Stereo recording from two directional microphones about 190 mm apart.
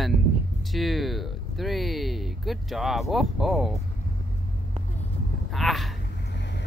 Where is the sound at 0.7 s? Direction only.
Centre (ahead or behind).